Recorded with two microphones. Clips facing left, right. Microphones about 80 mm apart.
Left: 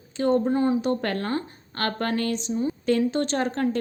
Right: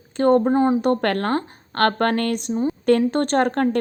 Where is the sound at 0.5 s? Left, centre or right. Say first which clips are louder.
Right 4 dB; right.